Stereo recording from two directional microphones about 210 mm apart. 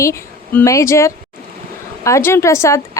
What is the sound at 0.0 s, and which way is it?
A woman's voice, 15° left (ahead or behind).